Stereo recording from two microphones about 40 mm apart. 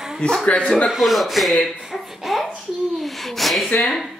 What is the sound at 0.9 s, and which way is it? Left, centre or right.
Speech, centre.